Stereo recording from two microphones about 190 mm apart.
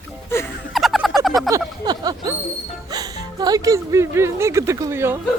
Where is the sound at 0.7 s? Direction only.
Centre (ahead or behind).